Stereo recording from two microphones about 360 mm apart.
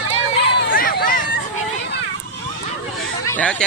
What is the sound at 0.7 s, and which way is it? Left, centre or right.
Hubbub, left.